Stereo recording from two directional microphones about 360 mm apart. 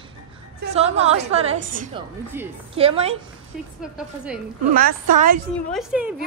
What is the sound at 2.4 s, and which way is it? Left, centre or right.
Speech, centre.